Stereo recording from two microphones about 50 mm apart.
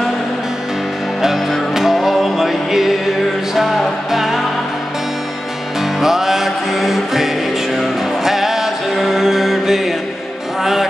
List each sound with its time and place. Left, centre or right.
1.7 s music: centre
5.8 s music: centre